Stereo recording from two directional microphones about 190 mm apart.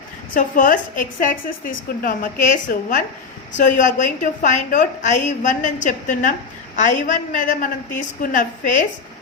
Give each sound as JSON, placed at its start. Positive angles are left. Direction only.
{"t": 0.3, "sound": "a woman's voice", "side_deg": 45}